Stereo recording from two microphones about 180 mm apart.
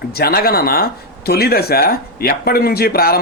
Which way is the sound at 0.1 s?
60° left (ahead or behind).